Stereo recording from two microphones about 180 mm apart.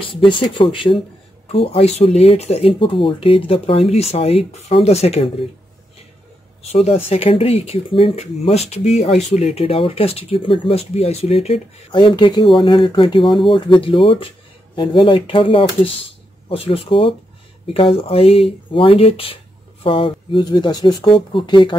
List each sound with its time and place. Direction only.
0.0 s speech: 30° left (ahead or behind)
6.6 s speech: 35° left (ahead or behind)